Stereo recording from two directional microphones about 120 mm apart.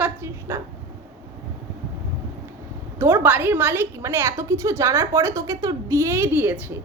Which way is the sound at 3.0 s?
15° right (ahead or behind).